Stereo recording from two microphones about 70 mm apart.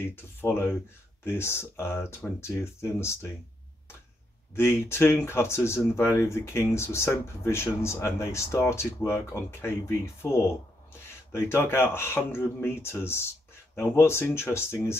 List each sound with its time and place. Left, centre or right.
0.1 s speech: left
4.6 s speech: left